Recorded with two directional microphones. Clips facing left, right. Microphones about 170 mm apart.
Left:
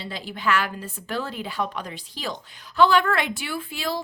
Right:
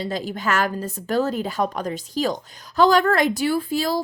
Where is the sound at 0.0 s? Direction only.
45° right (ahead or behind).